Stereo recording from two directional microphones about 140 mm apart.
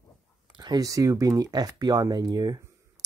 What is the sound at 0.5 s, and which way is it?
Speech, 30° right (ahead or behind).